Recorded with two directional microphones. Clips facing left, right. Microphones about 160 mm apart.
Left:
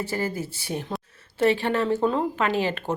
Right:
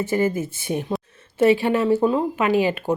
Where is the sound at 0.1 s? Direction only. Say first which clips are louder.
Right 7 dB; 20° right (ahead or behind).